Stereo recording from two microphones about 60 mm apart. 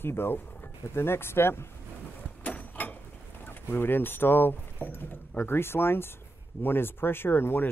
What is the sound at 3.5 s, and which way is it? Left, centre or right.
Speech, left.